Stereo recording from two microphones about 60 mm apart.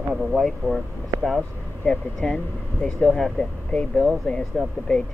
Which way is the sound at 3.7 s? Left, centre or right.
Centre.